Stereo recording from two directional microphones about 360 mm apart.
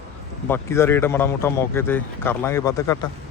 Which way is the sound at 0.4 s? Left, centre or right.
Centre.